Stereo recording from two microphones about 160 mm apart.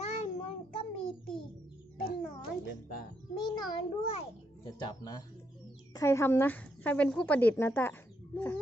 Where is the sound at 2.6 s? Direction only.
70° left (ahead or behind).